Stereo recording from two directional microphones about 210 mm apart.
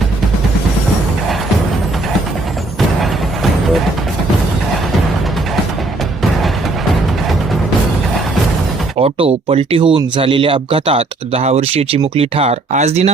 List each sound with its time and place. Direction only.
9.0 s speech: 30° right (ahead or behind)